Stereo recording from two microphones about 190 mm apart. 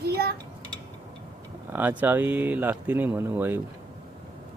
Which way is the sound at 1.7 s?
10° right (ahead or behind).